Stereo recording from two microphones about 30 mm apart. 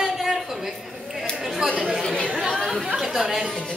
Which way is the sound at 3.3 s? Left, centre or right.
Centre.